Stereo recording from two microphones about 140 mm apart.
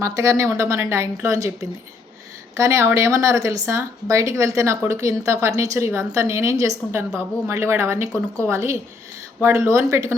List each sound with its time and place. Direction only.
0.0 s speech: 20° right (ahead or behind)
2.6 s speech: 20° right (ahead or behind)